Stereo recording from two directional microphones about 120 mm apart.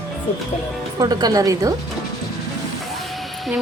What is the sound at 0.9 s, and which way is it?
Speech, 30° right (ahead or behind).